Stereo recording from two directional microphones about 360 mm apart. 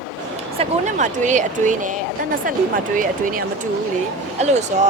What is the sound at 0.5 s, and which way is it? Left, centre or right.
Speech, centre.